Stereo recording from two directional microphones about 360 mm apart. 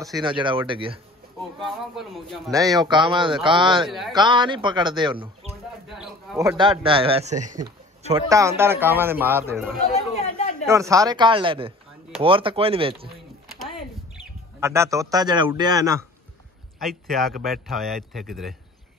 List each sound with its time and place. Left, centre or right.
0.0 s a man's voice: centre
1.6 s a man's voice: centre
9.9 s chatter: centre
10.6 s a man's voice: centre
14.6 s a man's voice: centre